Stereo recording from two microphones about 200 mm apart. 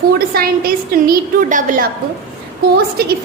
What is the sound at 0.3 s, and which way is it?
A woman's voice, 45° right (ahead or behind).